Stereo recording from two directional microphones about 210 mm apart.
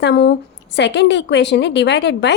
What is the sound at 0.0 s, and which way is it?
A woman's voice, 55° left (ahead or behind).